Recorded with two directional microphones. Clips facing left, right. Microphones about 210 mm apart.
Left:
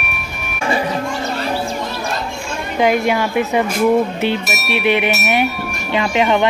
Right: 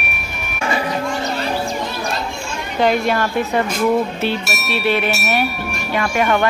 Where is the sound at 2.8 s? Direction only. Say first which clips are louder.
Left 1 dB; 10° left (ahead or behind).